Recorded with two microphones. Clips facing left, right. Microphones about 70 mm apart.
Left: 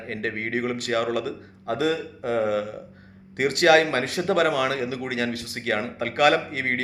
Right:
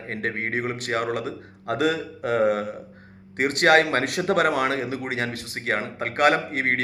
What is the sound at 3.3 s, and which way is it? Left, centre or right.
Speech, right.